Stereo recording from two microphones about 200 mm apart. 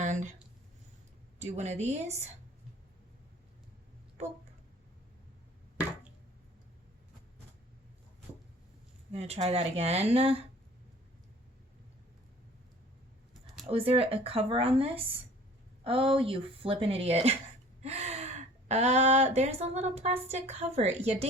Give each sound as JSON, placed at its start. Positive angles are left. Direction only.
{"t": 0.0, "sound": "a sound", "side_deg": -35}
{"t": 1.4, "sound": "speech", "side_deg": -35}
{"t": 9.1, "sound": "speech", "side_deg": -30}
{"t": 13.7, "sound": "speech", "side_deg": -30}
{"t": 17.8, "sound": "gasp", "side_deg": -30}
{"t": 18.7, "sound": "speech", "side_deg": -35}